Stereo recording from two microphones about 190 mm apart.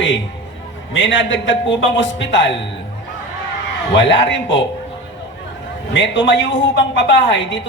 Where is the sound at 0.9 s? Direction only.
75° left (ahead or behind).